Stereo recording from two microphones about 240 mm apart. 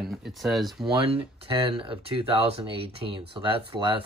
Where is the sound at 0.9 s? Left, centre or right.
Right.